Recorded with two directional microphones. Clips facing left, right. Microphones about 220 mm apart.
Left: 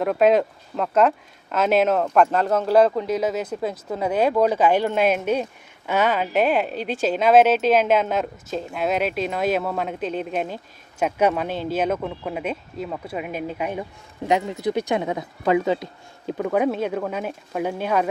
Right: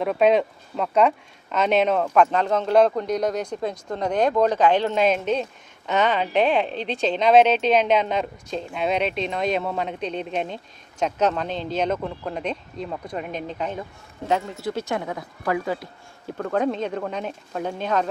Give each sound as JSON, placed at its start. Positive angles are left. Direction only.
{"t": 0.0, "sound": "speech", "side_deg": 0}
{"t": 16.5, "sound": "speech", "side_deg": 10}